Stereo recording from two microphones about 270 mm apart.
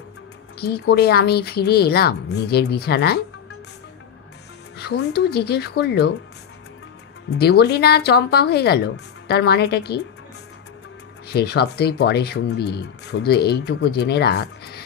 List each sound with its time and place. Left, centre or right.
0.6 s speech: left
4.7 s speech: left
7.2 s speech: left
11.2 s speech: left